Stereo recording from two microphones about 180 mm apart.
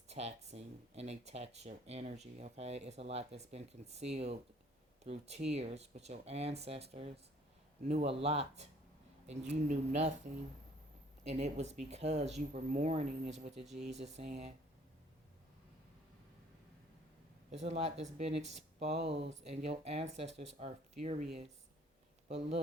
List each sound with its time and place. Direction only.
0.1 s speech: 35° right (ahead or behind)
11.3 s speech: 35° right (ahead or behind)
13.6 s speech: 5° right (ahead or behind)
14.2 s speech: 40° right (ahead or behind)
17.5 s speech: 35° right (ahead or behind)
22.3 s speech: 35° right (ahead or behind)